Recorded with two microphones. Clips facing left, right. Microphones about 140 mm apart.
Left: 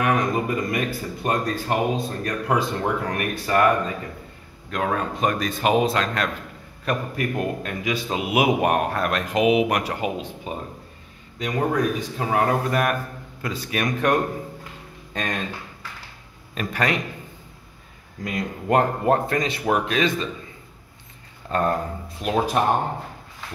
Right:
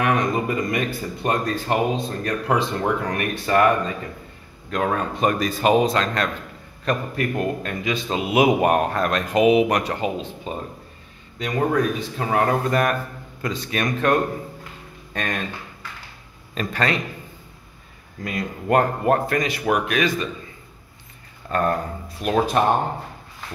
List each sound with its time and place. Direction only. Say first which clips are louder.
0.1 s speech: right 1 dB; 5° left (ahead or behind)
4.6 s a man's voice: right 2 dB; centre (ahead or behind); by 15.4 s 20° left (ahead or behind)
16.5 s a man's voice: right 1 dB; 10° left (ahead or behind)
18.2 s speech: even; 20° left (ahead or behind)
21.5 s speech: right 1 dB; 25° left (ahead or behind)
22.2 s a man's voice: right 2 dB; 10° left (ahead or behind)